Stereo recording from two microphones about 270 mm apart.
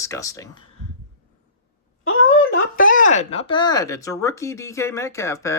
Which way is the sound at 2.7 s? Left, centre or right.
Left.